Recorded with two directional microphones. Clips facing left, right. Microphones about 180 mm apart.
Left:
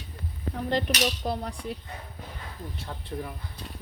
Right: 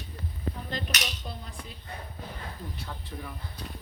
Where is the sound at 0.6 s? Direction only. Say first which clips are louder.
Left 9 dB; 70° left (ahead or behind).